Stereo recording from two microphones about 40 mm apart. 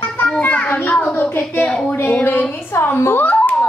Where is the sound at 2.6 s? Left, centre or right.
Left.